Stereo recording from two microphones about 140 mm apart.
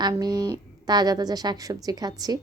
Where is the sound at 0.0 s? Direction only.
30° right (ahead or behind).